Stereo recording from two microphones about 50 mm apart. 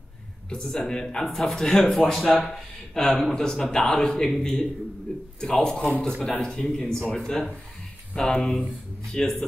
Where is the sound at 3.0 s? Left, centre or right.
Centre.